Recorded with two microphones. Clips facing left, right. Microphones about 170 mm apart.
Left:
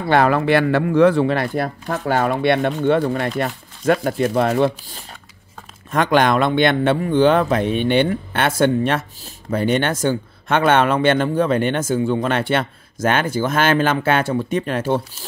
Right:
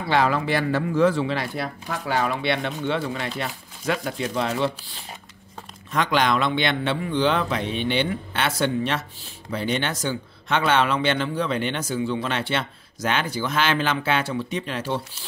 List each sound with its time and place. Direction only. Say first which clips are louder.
0.0 s speech: left 6 dB; 55° left (ahead or behind)